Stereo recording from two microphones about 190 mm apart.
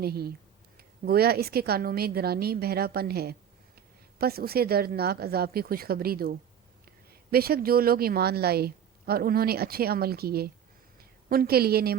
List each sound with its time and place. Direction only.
0.0 s a woman's voice: 55° right (ahead or behind)